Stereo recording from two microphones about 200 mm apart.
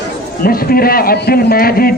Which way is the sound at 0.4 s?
50° left (ahead or behind).